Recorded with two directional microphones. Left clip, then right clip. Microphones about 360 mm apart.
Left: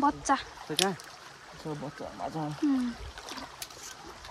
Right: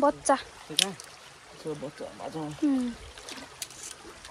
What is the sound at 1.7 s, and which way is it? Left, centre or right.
Speech, centre.